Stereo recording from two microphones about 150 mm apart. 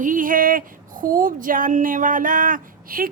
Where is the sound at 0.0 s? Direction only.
65° right (ahead or behind).